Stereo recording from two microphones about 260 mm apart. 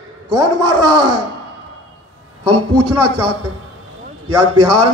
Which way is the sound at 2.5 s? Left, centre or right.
Right.